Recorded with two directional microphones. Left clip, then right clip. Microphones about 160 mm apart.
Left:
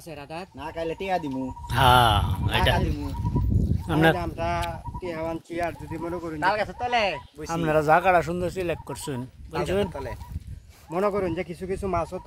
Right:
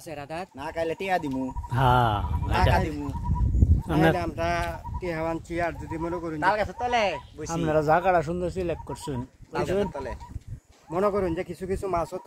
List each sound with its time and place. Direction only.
0.6 s speech: 5° left (ahead or behind)
2.8 s speech: 15° right (ahead or behind)
4.2 s speech: 45° right (ahead or behind)
5.0 s speech: 10° left (ahead or behind)
5.6 s speech: 30° left (ahead or behind); by 7.4 s 50° left (ahead or behind)
7.4 s speech: 5° left (ahead or behind)
9.5 s speech: 55° left (ahead or behind)
10.9 s speech: 45° left (ahead or behind)